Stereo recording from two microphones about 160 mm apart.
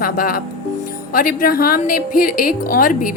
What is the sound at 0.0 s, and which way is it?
A woman's voice, 65° left (ahead or behind).